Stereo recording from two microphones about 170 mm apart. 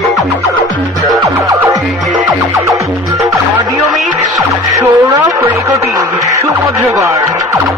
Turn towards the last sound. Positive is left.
turn(degrees=-20)  # may be behind; listen again after turning